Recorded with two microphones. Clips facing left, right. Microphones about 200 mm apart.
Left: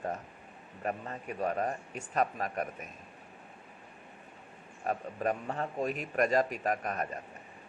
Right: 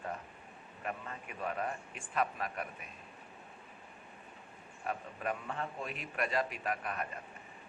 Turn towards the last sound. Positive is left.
turn(degrees=40)  # may be behind; listen again after turning